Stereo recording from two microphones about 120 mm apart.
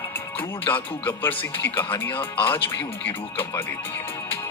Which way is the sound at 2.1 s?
45° left (ahead or behind).